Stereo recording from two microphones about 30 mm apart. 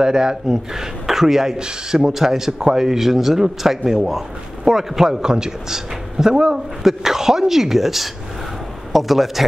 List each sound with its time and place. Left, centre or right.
0.0 s a man's voice: right
1.6 s a man's voice: right
2.0 s a man's voice: centre
5.2 s a man's voice: right
6.8 s a man's voice: centre